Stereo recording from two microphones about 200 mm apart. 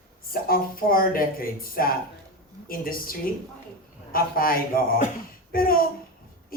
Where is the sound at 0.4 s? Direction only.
45° left (ahead or behind).